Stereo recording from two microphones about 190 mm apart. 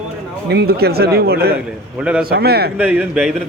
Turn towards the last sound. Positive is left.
turn(degrees=-5)  # may be behind; listen again after turning